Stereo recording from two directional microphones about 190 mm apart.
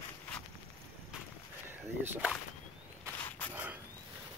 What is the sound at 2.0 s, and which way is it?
Speech, 10° right (ahead or behind).